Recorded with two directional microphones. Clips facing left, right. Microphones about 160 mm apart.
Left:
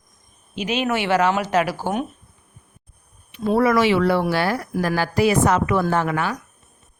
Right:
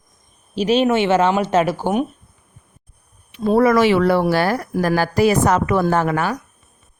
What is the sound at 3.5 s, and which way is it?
A woman's voice, 40° right (ahead or behind).